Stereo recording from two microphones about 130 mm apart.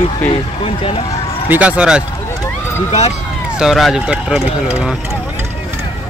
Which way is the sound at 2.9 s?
55° left (ahead or behind).